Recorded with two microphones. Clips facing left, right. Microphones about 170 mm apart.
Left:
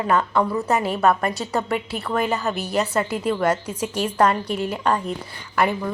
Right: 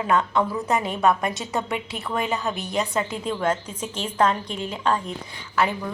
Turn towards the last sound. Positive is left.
turn(degrees=10)  # may be behind; listen again after turning